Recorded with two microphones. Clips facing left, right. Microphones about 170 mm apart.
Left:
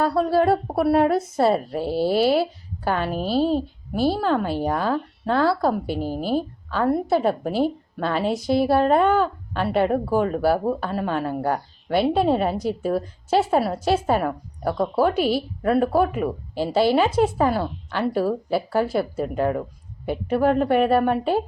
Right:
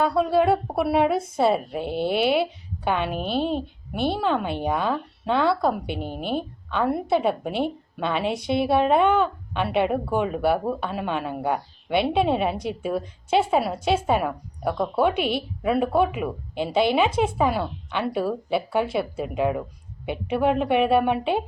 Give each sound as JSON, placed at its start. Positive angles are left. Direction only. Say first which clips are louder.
{"t": 0.0, "sound": "speech", "louder": "left 1 dB", "side_deg": 0}
{"t": 3.5, "sound": "speech", "louder": "left 4 dB", "side_deg": 5}